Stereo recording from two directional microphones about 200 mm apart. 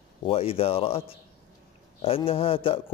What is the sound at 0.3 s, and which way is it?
Speech, 30° left (ahead or behind).